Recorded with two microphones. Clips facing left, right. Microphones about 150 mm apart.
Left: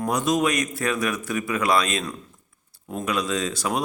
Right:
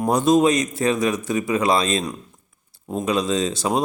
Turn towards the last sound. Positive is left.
turn(degrees=-25)  # may be behind; listen again after turning